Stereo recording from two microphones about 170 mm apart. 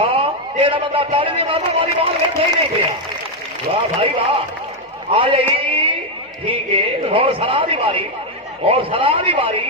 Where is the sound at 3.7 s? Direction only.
30° right (ahead or behind).